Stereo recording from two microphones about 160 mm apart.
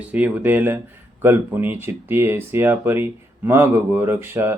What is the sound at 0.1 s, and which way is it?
Speech, 10° right (ahead or behind).